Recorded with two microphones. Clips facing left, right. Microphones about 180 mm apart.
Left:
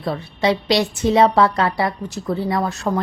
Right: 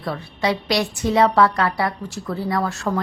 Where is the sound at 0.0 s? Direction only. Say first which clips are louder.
Left 3 dB; 25° left (ahead or behind).